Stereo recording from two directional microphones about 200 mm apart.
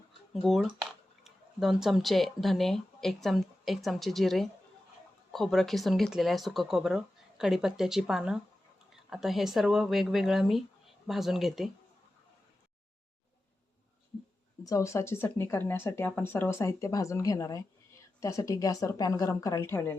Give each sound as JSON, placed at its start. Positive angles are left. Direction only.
{"t": 0.4, "sound": "speech", "side_deg": 0}
{"t": 14.6, "sound": "speech", "side_deg": 15}